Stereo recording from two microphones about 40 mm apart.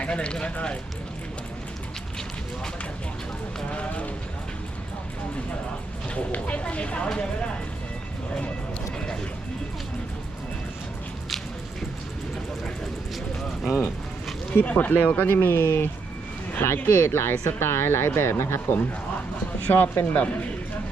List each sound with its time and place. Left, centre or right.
0.0 s speech: left
3.7 s vehicle: left
6.3 s speech: left
13.6 s speech: centre
14.5 s speech: left
19.6 s speech: left
20.1 s speech: left